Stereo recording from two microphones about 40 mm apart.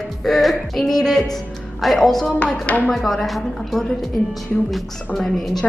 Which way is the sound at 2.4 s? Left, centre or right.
Left.